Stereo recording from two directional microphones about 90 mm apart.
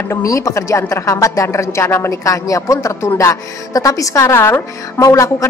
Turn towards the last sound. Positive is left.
turn(degrees=35)  # may be behind; listen again after turning